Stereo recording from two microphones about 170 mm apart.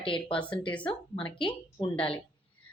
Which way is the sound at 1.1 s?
30° left (ahead or behind).